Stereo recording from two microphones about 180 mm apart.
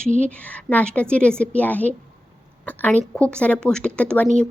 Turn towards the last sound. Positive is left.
turn(degrees=5)  # may be behind; listen again after turning